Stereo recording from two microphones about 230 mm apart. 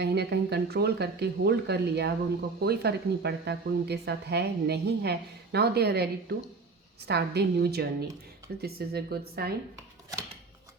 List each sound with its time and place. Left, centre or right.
0.0 s speech: right